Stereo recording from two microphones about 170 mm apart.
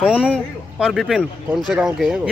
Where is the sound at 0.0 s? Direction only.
5° right (ahead or behind).